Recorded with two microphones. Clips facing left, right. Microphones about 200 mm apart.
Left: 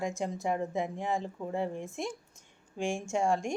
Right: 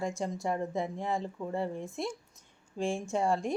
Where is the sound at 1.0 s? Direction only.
Centre (ahead or behind).